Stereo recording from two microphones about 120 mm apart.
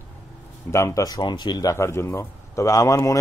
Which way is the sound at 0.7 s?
25° left (ahead or behind).